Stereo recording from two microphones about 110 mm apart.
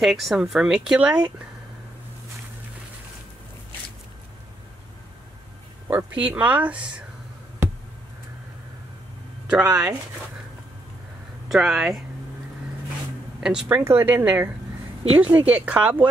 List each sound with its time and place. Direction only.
0.0 s speech: centre (ahead or behind)
5.9 s speech: 15° right (ahead or behind)
9.5 s speech: 10° right (ahead or behind)
11.4 s speech: centre (ahead or behind)
13.4 s speech: 5° right (ahead or behind)
13.7 s speech: 20° right (ahead or behind)